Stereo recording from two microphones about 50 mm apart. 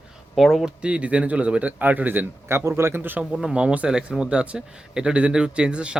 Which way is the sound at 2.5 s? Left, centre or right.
Right.